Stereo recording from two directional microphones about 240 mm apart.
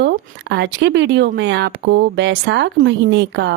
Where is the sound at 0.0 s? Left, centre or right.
Right.